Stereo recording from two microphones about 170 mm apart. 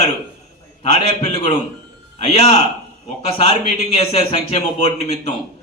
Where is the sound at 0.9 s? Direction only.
35° left (ahead or behind).